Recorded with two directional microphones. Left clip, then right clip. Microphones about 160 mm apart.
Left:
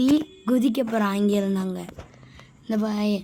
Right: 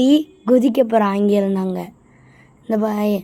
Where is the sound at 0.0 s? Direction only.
10° right (ahead or behind).